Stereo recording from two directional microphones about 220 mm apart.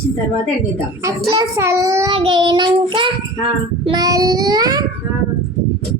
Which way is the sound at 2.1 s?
20° right (ahead or behind).